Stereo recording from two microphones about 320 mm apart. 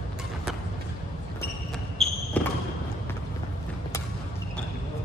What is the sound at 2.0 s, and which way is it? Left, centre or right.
Basketball bounce, centre.